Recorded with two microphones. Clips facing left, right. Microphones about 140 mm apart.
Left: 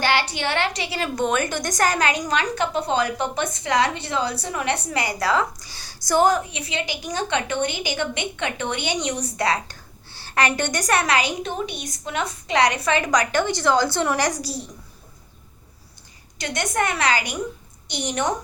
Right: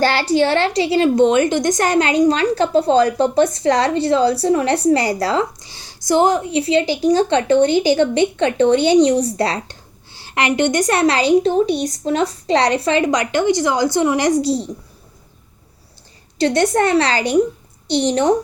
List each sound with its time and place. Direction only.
0.0 s a woman's voice: 35° right (ahead or behind)
10.1 s a woman's voice: 20° right (ahead or behind)
16.4 s a woman's voice: 30° right (ahead or behind)